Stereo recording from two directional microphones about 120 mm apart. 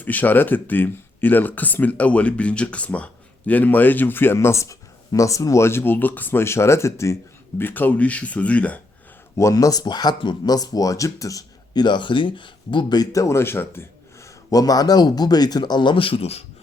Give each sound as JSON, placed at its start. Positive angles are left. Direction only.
{"t": 0.0, "sound": "speech", "side_deg": 15}
{"t": 9.4, "sound": "speech", "side_deg": 25}